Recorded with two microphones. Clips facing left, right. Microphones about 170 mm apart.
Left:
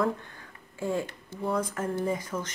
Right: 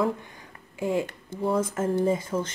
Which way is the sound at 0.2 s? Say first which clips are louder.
Right 2 dB; 15° right (ahead or behind).